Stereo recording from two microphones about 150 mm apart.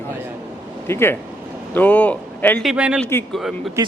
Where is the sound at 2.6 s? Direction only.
5° right (ahead or behind).